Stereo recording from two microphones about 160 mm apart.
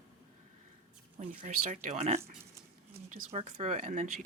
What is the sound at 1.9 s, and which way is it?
Speech, 40° right (ahead or behind).